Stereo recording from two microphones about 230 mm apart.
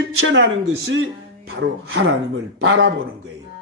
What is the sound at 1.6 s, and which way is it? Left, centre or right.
Speech, right.